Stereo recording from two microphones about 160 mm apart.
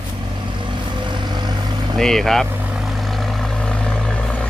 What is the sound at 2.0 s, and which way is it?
Speech, centre (ahead or behind).